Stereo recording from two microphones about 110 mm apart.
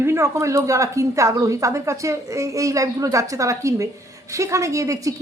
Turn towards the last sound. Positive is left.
turn(degrees=-30)  # may be behind; listen again after turning